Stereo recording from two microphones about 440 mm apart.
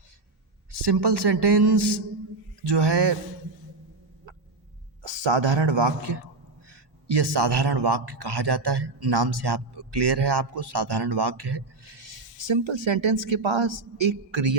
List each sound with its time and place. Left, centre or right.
0.7 s speech: right
2.6 s a sound: right
5.0 s speech: right